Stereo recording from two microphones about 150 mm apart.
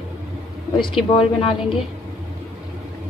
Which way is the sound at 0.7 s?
30° left (ahead or behind).